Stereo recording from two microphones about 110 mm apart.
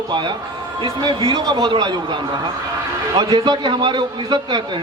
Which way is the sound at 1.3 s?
35° right (ahead or behind).